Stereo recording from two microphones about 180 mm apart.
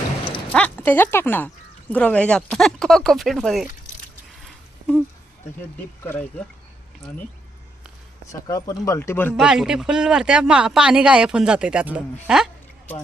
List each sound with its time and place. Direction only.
0.5 s speech: 10° left (ahead or behind)
6.0 s speech: 15° left (ahead or behind)
8.3 s speech: 20° left (ahead or behind)
9.3 s speech: 5° right (ahead or behind)